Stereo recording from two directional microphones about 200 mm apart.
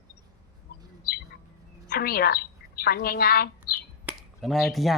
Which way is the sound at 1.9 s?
50° left (ahead or behind).